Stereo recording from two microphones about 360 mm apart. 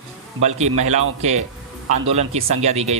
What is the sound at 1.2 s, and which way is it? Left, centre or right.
Speech, centre.